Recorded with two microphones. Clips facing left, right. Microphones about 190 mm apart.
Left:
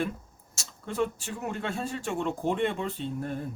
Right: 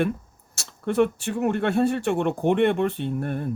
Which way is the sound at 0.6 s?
65° right (ahead or behind).